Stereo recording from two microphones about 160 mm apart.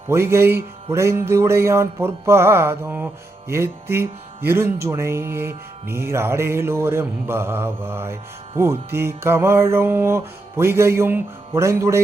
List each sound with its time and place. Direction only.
0.1 s music: 15° right (ahead or behind)